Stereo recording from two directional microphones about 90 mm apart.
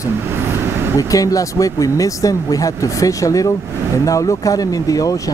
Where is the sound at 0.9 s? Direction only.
40° left (ahead or behind).